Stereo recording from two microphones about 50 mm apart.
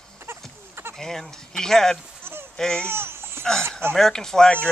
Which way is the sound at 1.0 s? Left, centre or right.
Centre.